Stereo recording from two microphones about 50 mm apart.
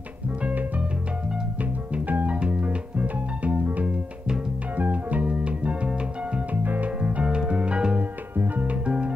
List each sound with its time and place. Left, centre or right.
0.4 s music: right
4.7 s music: right
6.5 s music: right
7.0 s music: right
8.0 s music: right
8.8 s music: right